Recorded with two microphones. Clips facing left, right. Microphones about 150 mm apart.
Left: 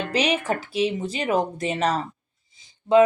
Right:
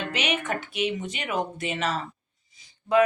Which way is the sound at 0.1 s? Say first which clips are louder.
Left 8 dB; 35° left (ahead or behind).